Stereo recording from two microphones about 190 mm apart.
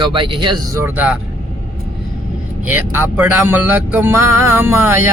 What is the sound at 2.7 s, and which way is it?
Music, 10° right (ahead or behind).